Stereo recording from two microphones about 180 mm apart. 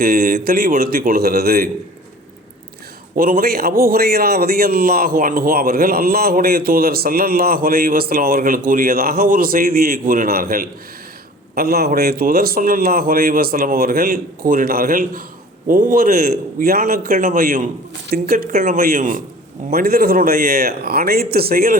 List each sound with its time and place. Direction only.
0.0 s a man's voice: 55° right (ahead or behind)
3.2 s a man's voice: 55° right (ahead or behind)
19.7 s a man's voice: 55° right (ahead or behind)